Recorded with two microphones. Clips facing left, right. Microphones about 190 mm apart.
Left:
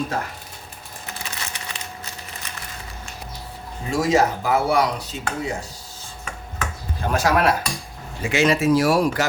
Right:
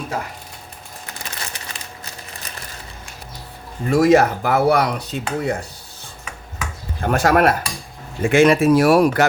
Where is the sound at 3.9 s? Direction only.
60° right (ahead or behind).